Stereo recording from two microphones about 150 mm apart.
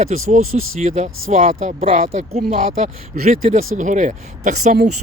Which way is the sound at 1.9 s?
45° right (ahead or behind).